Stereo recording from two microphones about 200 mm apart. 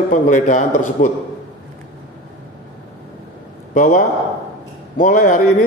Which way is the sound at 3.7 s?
40° left (ahead or behind).